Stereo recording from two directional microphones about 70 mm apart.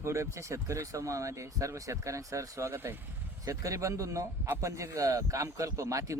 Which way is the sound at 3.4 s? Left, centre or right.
Right.